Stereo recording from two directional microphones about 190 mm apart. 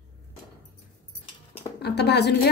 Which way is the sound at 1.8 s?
60° left (ahead or behind).